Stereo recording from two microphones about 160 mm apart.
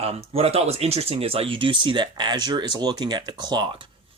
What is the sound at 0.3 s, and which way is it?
Speech, 40° right (ahead or behind).